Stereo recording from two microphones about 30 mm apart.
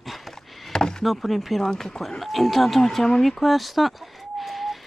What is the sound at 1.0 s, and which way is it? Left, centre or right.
Speech, centre.